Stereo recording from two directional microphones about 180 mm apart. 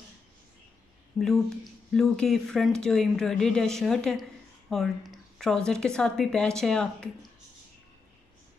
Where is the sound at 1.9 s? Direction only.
5° left (ahead or behind).